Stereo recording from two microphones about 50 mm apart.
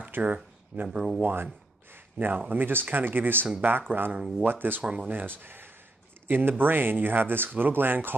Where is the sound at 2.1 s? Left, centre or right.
Right.